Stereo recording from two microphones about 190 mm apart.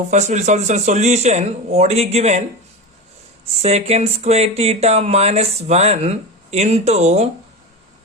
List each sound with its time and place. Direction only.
0.1 s speech: 40° right (ahead or behind)
3.4 s speech: 35° right (ahead or behind)